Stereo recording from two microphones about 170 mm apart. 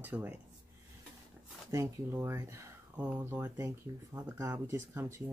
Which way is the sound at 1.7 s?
15° right (ahead or behind).